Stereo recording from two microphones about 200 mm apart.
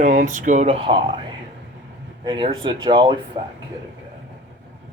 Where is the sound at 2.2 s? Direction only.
25° right (ahead or behind).